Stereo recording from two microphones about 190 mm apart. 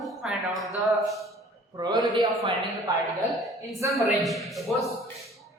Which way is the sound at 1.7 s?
20° right (ahead or behind).